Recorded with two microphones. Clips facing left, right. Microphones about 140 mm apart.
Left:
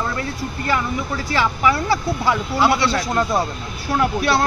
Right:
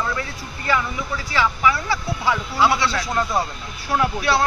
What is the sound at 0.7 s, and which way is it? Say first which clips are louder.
Speech: left 2 dB; 40° left (ahead or behind).